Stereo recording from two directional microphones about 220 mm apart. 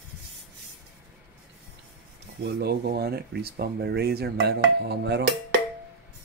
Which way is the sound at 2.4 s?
45° right (ahead or behind).